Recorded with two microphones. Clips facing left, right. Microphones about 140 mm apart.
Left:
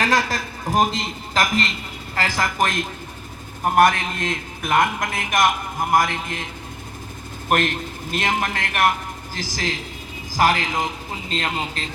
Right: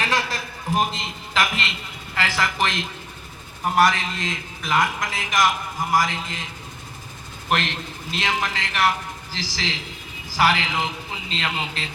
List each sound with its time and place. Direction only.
0.0 s a man's voice: 40° left (ahead or behind)
7.5 s a man's voice: 50° left (ahead or behind)